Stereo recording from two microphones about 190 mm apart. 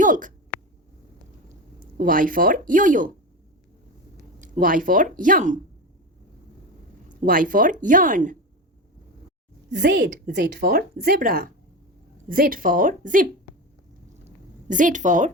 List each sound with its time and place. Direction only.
0.0 s a sound: 45° right (ahead or behind)
2.0 s speech: 45° right (ahead or behind)
4.5 s speech: 45° right (ahead or behind)
7.2 s speech: 45° right (ahead or behind)
9.9 s speech: 45° right (ahead or behind)
10.3 s speech: 60° right (ahead or behind); by 13.2 s 45° right (ahead or behind)
14.3 s a sound: 45° right (ahead or behind)